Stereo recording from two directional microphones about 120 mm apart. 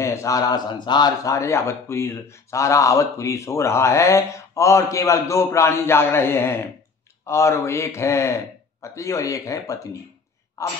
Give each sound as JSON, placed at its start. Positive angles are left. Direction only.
{"t": 0.0, "sound": "speech", "side_deg": 25}